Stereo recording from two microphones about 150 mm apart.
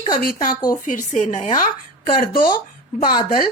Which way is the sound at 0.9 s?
55° left (ahead or behind).